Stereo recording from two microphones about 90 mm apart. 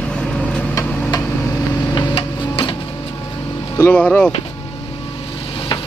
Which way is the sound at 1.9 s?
75° left (ahead or behind).